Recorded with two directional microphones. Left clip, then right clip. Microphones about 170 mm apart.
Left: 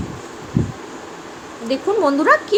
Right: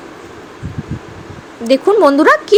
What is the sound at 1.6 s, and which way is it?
Speech, 50° right (ahead or behind).